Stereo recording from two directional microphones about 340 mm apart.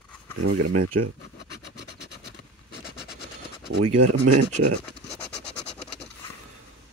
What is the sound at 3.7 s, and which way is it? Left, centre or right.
Speech, right.